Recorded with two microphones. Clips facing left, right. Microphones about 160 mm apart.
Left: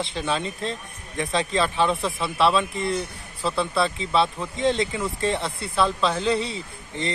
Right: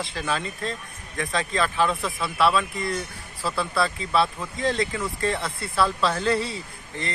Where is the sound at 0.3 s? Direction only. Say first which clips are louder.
Left 1 dB; 25° left (ahead or behind).